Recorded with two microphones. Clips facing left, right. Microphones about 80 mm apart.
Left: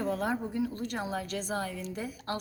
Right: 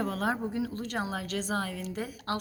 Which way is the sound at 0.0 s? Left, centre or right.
Right.